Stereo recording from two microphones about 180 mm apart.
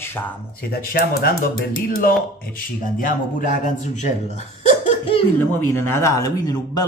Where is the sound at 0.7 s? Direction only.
55° left (ahead or behind).